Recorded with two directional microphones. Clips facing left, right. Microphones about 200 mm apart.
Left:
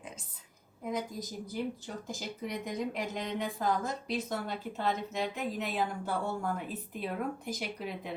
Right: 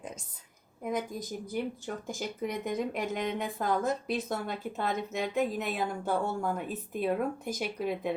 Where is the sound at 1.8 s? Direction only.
50° right (ahead or behind).